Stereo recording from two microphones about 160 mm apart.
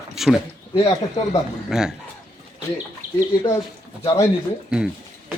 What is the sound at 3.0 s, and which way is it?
Bird, 50° right (ahead or behind).